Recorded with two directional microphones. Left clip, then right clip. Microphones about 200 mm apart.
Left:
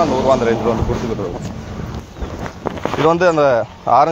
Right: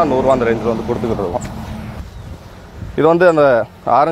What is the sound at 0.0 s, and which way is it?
Speech, 50° right (ahead or behind).